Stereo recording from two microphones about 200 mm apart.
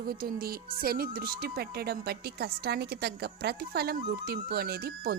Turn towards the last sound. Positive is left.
turn(degrees=-50)  # may be behind; listen again after turning